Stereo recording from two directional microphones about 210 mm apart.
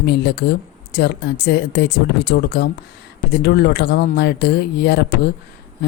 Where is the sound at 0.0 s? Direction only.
50° left (ahead or behind).